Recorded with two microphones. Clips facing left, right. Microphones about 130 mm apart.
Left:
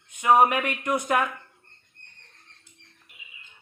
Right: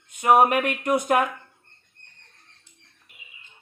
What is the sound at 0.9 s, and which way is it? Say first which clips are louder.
Speech: right 3 dB; 15° right (ahead or behind).